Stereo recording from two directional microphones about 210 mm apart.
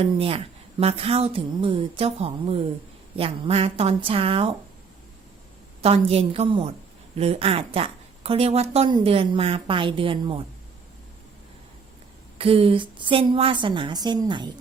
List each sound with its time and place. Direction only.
0.0 s a woman's voice: 30° right (ahead or behind)
5.8 s a woman's voice: 30° right (ahead or behind)
12.4 s a woman's voice: 25° right (ahead or behind)